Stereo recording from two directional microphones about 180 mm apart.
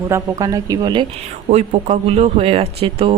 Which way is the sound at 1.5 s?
40° right (ahead or behind).